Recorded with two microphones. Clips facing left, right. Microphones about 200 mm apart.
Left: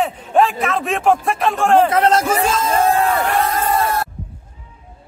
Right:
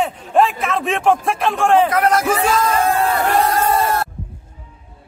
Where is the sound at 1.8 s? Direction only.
25° left (ahead or behind).